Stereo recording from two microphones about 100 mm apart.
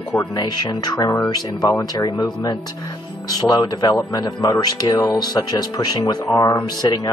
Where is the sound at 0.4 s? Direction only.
40° left (ahead or behind).